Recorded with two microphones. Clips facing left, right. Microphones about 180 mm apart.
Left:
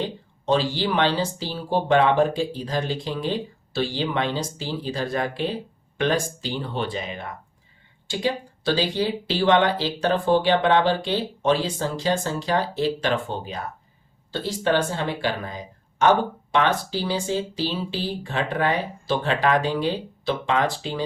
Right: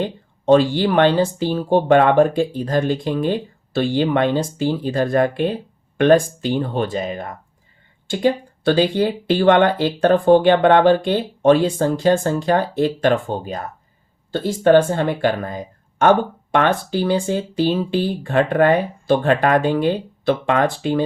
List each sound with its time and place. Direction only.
0.0 s speech: 55° right (ahead or behind)
14.3 s speech: 50° right (ahead or behind)